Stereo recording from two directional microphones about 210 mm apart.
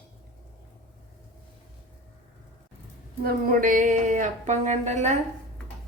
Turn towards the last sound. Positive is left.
turn(degrees=-35)  # may be behind; listen again after turning